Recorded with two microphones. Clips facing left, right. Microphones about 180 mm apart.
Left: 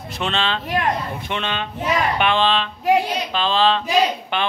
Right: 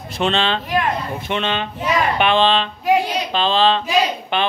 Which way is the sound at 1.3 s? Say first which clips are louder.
Right 5 dB; 20° right (ahead or behind).